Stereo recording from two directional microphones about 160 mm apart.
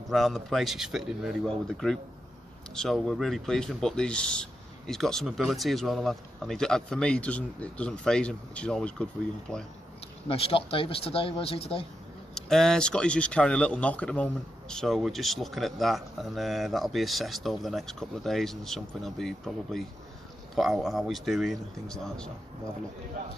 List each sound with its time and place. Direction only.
0.1 s speech: centre (ahead or behind)
10.2 s speech: 35° left (ahead or behind)
12.4 s speech: 5° left (ahead or behind)